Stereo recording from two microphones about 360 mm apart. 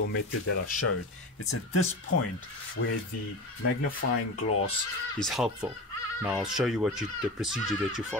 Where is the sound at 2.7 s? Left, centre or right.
Left.